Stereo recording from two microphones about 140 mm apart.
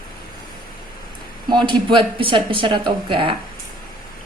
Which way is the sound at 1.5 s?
35° right (ahead or behind).